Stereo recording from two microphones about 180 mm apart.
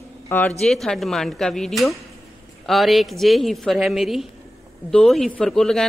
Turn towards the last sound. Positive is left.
turn(degrees=0)  # may be behind; listen again after turning